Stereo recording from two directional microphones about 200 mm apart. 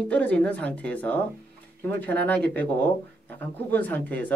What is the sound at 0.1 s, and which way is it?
Speech, 5° left (ahead or behind).